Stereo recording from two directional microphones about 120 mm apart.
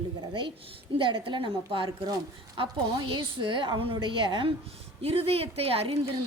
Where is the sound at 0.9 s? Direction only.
45° right (ahead or behind).